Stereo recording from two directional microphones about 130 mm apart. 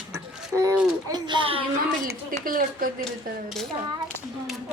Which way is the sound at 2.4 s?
90° right.